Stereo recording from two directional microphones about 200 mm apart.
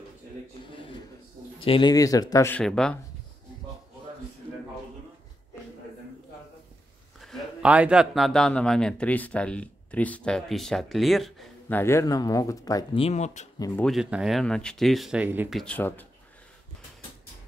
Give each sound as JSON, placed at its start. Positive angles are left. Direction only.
{"t": 1.6, "sound": "speech", "side_deg": 25}
{"t": 2.6, "sound": "speech", "side_deg": 5}
{"t": 7.2, "sound": "a man's voice", "side_deg": -5}
{"t": 11.8, "sound": "speech", "side_deg": 15}
{"t": 13.0, "sound": "speech", "side_deg": 35}
{"t": 13.8, "sound": "speech", "side_deg": 0}
{"t": 15.6, "sound": "speech", "side_deg": 10}